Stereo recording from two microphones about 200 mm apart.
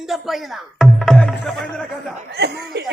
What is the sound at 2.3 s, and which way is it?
Chuckle, 55° right (ahead or behind).